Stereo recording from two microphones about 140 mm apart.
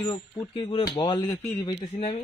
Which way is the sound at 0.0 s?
35° left (ahead or behind).